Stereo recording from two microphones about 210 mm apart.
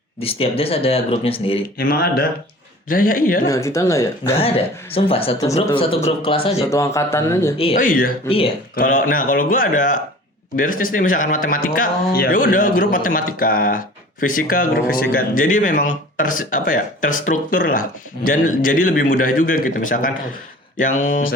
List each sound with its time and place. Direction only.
0.2 s speech: 25° left (ahead or behind)
1.8 s speech: 45° left (ahead or behind)
3.4 s speech: 15° left (ahead or behind)
4.4 s speech: 25° left (ahead or behind)
6.7 s speech: 15° left (ahead or behind)
7.8 s speech: 40° left (ahead or behind)
8.3 s speech: 25° left (ahead or behind)
8.7 s speech: 40° left (ahead or behind)